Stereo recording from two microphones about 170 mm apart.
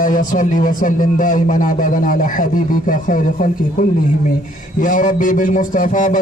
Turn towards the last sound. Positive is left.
turn(degrees=50)  # may be behind; listen again after turning